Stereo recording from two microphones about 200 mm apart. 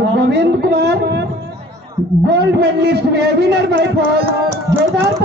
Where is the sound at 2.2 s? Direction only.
55° right (ahead or behind).